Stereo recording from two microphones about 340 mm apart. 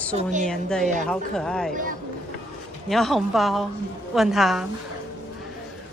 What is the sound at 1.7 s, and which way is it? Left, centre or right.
Speech, right.